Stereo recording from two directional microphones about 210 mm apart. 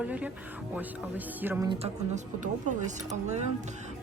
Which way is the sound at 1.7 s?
30° right (ahead or behind).